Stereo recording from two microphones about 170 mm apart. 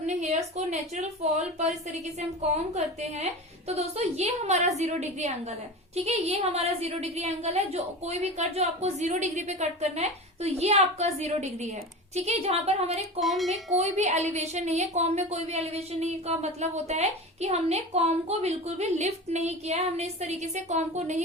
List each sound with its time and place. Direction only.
0.0 s a woman's voice: 45° right (ahead or behind)
13.1 s speech: centre (ahead or behind)
13.7 s a woman's voice: 40° right (ahead or behind)